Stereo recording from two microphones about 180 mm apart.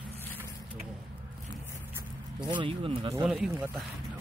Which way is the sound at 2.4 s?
25° right (ahead or behind).